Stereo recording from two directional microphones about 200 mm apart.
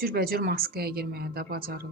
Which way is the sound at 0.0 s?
50° right (ahead or behind).